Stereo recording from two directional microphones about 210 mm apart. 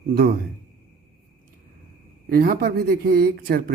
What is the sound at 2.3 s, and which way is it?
Speech, 45° right (ahead or behind).